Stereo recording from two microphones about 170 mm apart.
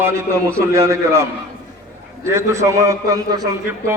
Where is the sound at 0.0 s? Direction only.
15° right (ahead or behind).